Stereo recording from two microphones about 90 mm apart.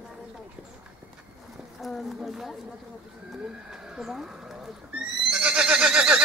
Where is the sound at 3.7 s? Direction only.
5° right (ahead or behind).